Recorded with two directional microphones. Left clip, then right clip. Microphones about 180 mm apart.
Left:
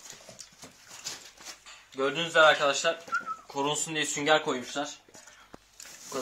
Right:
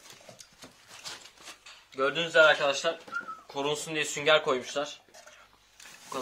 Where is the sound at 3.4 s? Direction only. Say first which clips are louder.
Left 2 dB; centre (ahead or behind).